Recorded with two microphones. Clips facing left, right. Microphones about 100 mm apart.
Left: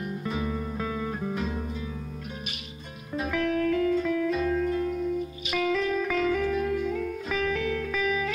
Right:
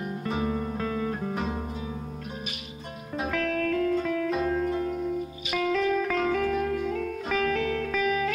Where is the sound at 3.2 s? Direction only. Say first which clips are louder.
Left 1 dB; 35° right (ahead or behind).